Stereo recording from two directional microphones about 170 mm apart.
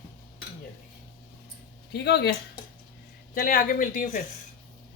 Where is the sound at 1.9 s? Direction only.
75° left (ahead or behind).